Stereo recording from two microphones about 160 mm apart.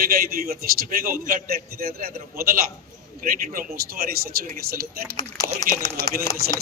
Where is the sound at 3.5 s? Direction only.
70° right (ahead or behind).